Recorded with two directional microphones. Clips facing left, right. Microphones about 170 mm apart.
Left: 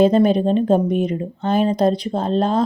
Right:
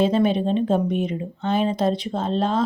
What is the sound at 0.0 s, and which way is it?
Speech, 40° left (ahead or behind).